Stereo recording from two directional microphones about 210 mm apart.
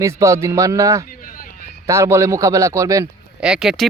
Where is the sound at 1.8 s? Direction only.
15° right (ahead or behind).